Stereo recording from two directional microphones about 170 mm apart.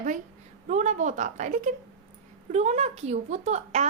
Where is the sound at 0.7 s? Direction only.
45° right (ahead or behind).